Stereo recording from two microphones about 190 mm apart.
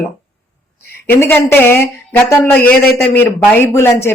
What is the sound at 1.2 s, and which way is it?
Speech, 10° left (ahead or behind).